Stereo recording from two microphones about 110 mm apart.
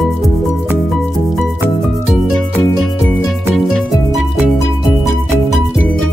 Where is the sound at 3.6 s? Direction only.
Centre (ahead or behind).